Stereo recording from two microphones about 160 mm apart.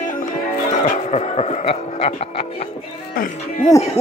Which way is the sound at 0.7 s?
45° left (ahead or behind).